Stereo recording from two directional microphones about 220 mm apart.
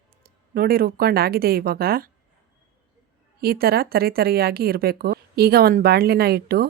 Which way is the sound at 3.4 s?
45° right (ahead or behind).